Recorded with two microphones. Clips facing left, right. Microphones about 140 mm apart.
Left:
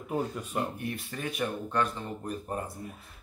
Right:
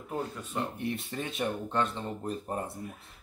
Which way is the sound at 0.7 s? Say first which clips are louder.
Right 2 dB; 25° right (ahead or behind).